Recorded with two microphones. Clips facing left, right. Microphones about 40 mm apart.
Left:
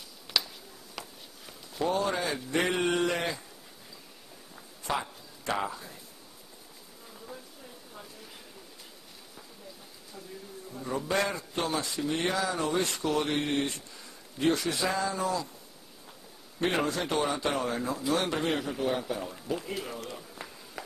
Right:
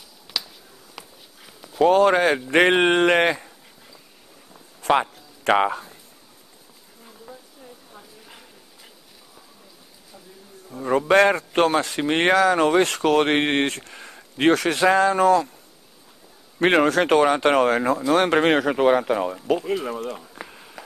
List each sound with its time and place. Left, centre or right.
0.3 s a sound: centre
0.9 s walk: centre
1.8 s speech: right
4.8 s a sound: right
5.4 s speech: right
10.9 s speech: right
16.6 s speech: right
19.4 s speech: right